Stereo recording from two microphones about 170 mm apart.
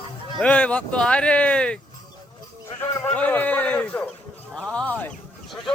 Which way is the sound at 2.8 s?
10° left (ahead or behind).